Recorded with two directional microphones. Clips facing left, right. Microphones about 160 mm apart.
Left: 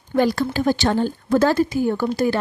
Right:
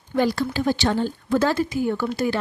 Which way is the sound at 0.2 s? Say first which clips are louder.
Left 3 dB; 50° left (ahead or behind).